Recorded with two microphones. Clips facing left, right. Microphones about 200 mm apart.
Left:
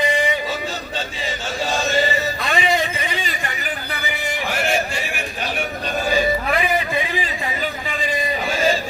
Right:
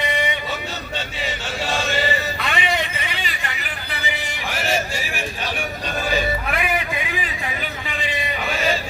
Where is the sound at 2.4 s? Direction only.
40° left (ahead or behind).